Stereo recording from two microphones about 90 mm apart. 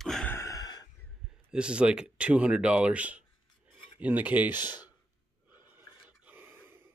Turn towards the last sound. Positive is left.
turn(degrees=-25)  # may be behind; listen again after turning